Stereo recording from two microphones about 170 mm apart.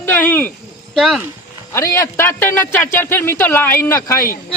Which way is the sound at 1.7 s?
15° left (ahead or behind).